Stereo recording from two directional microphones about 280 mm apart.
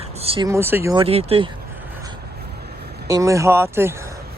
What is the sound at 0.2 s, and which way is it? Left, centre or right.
Speech, centre.